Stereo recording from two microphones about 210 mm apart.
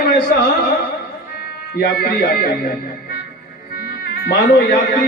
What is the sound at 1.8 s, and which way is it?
Speech, 45° left (ahead or behind).